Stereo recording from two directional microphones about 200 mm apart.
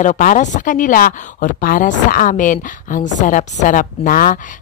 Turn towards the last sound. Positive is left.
turn(degrees=45)  # may be behind; listen again after turning